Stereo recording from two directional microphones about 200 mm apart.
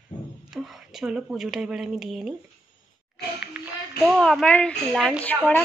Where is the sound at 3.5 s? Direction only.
5° right (ahead or behind).